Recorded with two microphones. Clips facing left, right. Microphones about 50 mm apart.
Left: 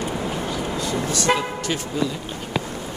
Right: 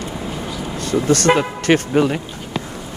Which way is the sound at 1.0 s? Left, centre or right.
Right.